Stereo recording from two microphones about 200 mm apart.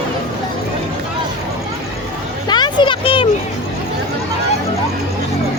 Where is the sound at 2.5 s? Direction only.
20° left (ahead or behind).